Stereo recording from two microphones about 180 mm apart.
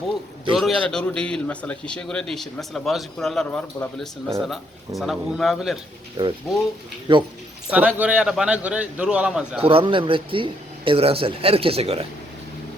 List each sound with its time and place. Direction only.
0.5 s a man's voice: centre (ahead or behind)
6.2 s speech: 25° right (ahead or behind)
7.7 s a man's voice: 10° right (ahead or behind)
9.6 s a man's voice: 30° right (ahead or behind)